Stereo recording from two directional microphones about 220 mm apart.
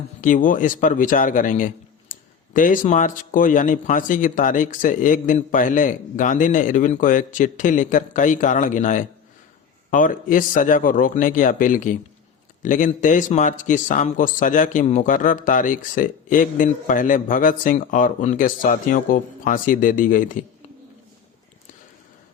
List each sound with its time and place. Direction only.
0.2 s a man's voice: 35° left (ahead or behind)